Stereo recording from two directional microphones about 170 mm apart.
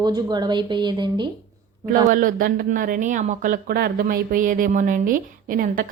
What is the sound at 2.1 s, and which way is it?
A woman's voice, 50° right (ahead or behind).